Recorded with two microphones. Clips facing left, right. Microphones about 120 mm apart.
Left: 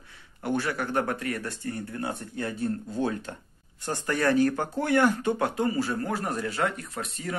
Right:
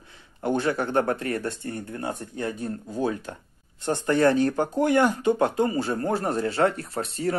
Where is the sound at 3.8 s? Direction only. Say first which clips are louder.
Right 6 dB; 25° right (ahead or behind).